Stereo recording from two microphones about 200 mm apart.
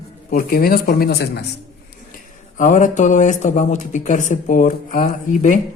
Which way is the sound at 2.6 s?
40° left (ahead or behind).